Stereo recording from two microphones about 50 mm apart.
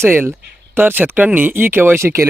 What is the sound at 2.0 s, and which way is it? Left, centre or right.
Speech, right.